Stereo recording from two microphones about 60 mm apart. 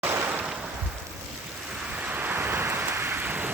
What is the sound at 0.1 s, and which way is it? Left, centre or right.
Waves, right.